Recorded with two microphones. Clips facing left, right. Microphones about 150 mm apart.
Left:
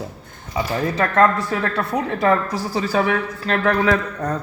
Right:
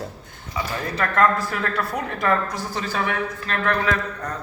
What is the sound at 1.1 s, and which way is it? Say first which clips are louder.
A woman's voice: left 2 dB; 25° left (ahead or behind).